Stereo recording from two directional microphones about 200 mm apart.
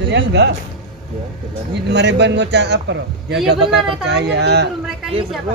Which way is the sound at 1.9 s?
60° right (ahead or behind).